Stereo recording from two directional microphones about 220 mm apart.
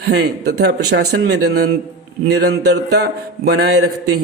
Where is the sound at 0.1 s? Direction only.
50° right (ahead or behind).